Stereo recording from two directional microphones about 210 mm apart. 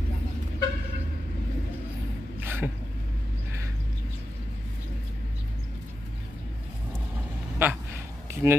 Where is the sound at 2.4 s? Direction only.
10° right (ahead or behind).